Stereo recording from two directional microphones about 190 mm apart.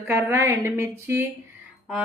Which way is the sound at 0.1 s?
15° right (ahead or behind).